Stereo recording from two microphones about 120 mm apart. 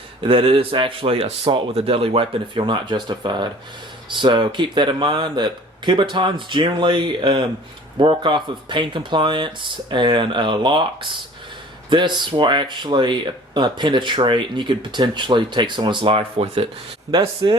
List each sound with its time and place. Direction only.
0.2 s speech: 50° right (ahead or behind)